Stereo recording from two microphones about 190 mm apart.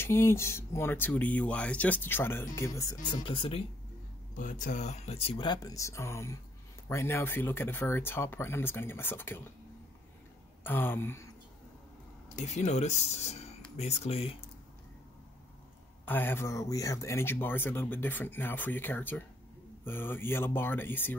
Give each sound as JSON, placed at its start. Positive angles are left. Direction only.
{"t": 0.0, "sound": "speech", "side_deg": 15}
{"t": 4.4, "sound": "speech", "side_deg": 45}
{"t": 10.6, "sound": "speech", "side_deg": 10}
{"t": 12.4, "sound": "speech", "side_deg": 40}
{"t": 16.1, "sound": "speech", "side_deg": 10}